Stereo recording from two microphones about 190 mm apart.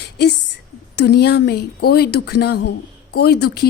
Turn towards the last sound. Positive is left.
turn(degrees=60)  # may be behind; listen again after turning